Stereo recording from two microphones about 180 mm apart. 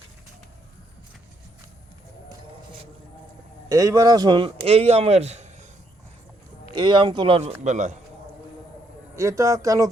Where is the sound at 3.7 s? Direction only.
20° right (ahead or behind); by 5.4 s 35° right (ahead or behind).